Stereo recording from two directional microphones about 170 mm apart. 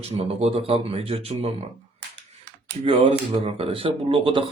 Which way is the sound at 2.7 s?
35° right (ahead or behind).